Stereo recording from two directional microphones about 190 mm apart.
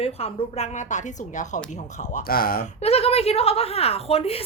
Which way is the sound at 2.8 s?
30° left (ahead or behind).